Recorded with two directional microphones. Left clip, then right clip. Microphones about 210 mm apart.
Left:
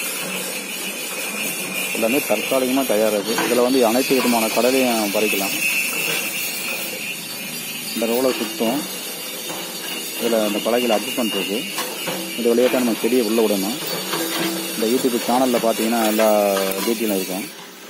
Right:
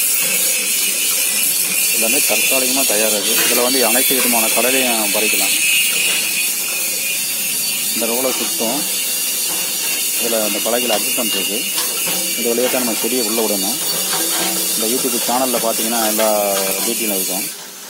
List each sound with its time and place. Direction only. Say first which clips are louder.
3.6 s speech: right 1 dB; 15° right (ahead or behind)
15.3 s speech: even; 10° right (ahead or behind)